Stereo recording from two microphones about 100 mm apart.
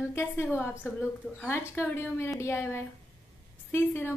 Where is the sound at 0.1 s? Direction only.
25° left (ahead or behind).